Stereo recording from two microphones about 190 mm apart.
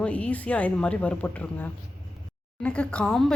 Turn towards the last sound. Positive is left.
turn(degrees=0)  # may be behind; listen again after turning